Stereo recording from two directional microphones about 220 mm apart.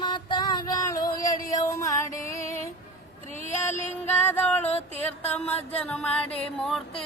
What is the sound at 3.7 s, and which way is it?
Music, 35° left (ahead or behind).